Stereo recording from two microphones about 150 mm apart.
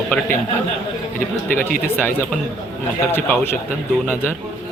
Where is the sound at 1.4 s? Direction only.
10° left (ahead or behind).